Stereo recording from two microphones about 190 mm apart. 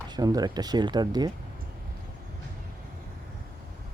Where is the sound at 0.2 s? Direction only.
20° right (ahead or behind).